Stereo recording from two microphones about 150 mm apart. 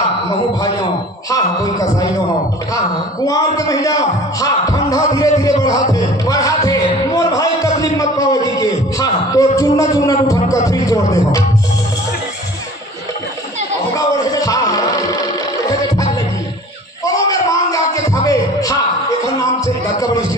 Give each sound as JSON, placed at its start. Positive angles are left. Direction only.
{"t": 1.3, "sound": "music", "side_deg": 25}
{"t": 3.3, "sound": "speech", "side_deg": 25}
{"t": 5.9, "sound": "a sound", "side_deg": 20}
{"t": 13.9, "sound": "music", "side_deg": 25}